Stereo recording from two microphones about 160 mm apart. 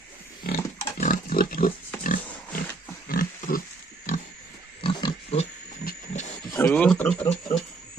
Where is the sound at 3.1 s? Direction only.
60° left (ahead or behind).